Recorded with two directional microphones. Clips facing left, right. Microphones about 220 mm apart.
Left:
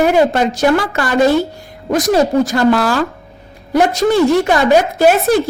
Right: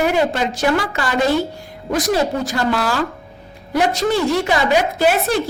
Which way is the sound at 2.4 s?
55° left (ahead or behind).